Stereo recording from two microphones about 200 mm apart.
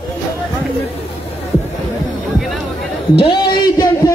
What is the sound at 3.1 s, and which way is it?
Speech, 25° left (ahead or behind).